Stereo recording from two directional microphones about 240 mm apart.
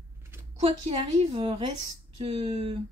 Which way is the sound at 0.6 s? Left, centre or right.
Right.